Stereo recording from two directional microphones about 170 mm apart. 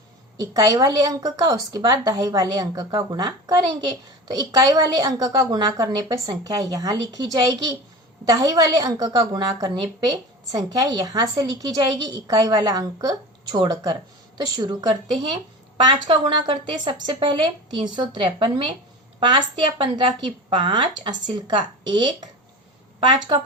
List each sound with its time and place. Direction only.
0.3 s a woman's voice: 25° right (ahead or behind)